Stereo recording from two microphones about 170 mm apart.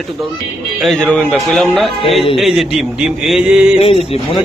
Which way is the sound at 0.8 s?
Centre (ahead or behind).